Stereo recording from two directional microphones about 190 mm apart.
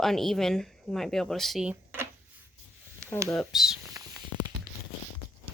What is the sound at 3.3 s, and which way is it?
Speech, centre (ahead or behind).